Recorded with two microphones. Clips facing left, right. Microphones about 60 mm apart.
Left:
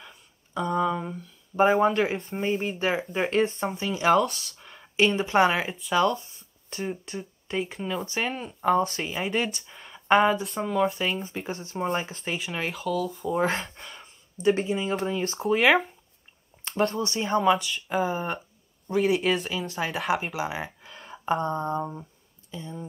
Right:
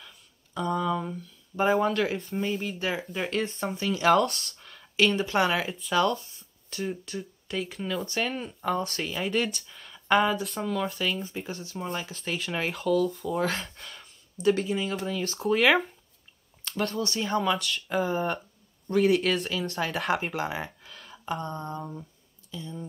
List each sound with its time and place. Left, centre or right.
0.0 s a sound: left
1.6 s speech: left
4.1 s speech: centre
4.6 s speech: left
7.9 s speech: centre
11.2 s speech: left
12.3 s speech: centre
13.4 s speech: left
15.4 s speech: centre
16.6 s speech: left; by 20.7 s centre
20.8 s speech: left
22.6 s speech: centre